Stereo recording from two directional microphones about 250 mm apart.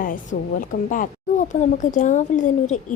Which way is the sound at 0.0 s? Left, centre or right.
Left.